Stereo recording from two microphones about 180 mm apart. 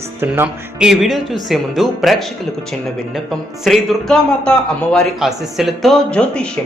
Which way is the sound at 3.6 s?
Centre (ahead or behind).